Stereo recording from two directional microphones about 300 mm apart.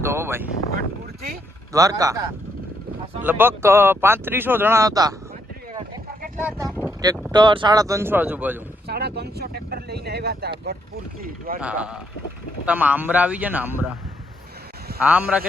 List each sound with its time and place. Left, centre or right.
0.0 s a sound: centre
1.7 s speech: centre
6.4 s speech: centre
8.9 s vehicle: right
11.2 s speech: right
11.6 s a man's voice: centre
15.0 s a man's voice: centre